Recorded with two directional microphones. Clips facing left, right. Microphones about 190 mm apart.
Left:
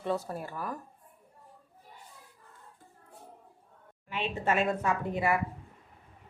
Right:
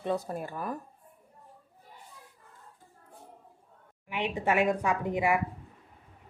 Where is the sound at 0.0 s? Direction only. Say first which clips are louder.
Right 1 dB; 20° right (ahead or behind).